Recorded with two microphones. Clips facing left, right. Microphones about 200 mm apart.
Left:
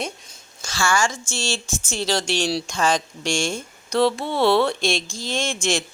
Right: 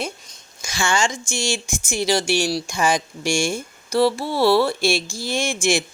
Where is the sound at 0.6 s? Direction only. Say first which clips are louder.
Even; 15° right (ahead or behind).